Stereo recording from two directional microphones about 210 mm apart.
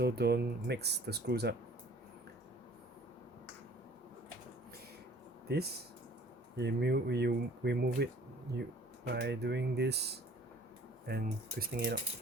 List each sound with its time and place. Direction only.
0.0 s speech: 50° right (ahead or behind)
5.5 s speech: 50° right (ahead or behind)